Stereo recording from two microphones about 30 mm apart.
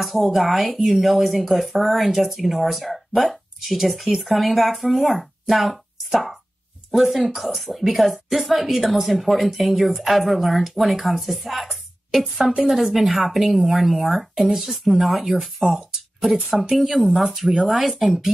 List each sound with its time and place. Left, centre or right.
0.0 s speech: centre
6.9 s speech: centre
15.6 s speech: right
16.7 s speech: centre
17.3 s speech: centre